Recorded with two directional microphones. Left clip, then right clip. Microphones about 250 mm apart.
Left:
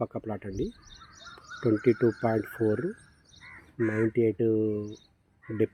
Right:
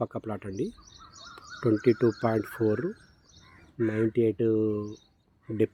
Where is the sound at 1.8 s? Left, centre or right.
Centre.